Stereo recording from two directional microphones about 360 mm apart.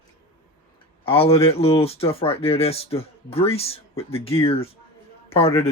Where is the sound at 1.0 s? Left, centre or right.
Centre.